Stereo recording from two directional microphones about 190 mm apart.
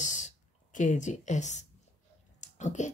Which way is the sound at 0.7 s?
40° left (ahead or behind).